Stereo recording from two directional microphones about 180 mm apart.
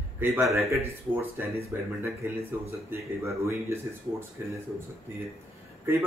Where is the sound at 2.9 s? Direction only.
15° right (ahead or behind).